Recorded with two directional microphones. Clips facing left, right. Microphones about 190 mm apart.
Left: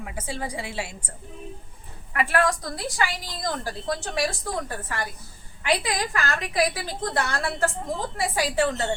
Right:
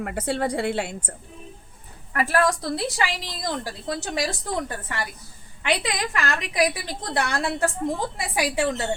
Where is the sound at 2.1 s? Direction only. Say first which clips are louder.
Right 1 dB; 40° right (ahead or behind).